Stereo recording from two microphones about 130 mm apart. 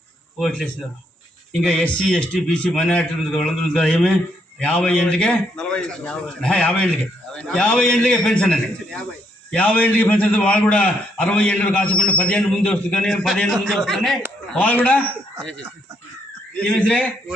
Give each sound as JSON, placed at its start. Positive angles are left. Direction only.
{"t": 0.3, "sound": "a man's voice", "side_deg": 0}
{"t": 16.6, "sound": "a man's voice", "side_deg": 10}